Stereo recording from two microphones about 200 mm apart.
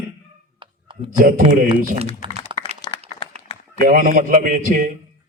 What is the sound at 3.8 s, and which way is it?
A man's voice, 45° right (ahead or behind).